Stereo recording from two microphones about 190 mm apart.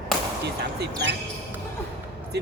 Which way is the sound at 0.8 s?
65° right (ahead or behind).